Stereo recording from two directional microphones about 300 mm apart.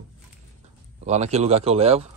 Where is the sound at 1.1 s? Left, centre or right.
Right.